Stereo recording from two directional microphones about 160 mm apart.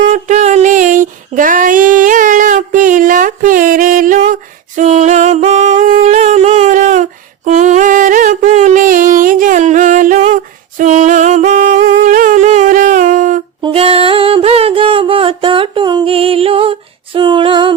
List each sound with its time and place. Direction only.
0.1 s female singing: 45° right (ahead or behind)
10.3 s singing: 50° right (ahead or behind)
13.6 s music: 35° right (ahead or behind)